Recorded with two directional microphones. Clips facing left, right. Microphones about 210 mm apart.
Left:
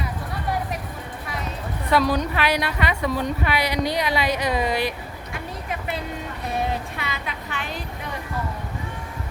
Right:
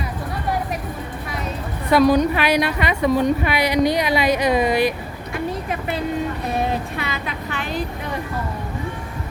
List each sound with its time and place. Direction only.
1.9 s a woman's voice: 15° right (ahead or behind)